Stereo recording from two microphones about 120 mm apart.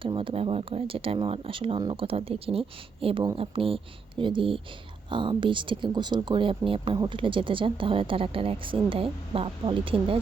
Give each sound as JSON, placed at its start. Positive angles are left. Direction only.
{"t": 0.0, "sound": "speech", "side_deg": -45}